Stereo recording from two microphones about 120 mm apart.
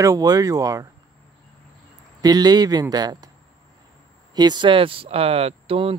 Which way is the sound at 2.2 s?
35° right (ahead or behind).